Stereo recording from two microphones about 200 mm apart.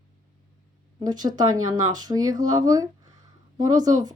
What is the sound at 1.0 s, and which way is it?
Speech, 20° right (ahead or behind).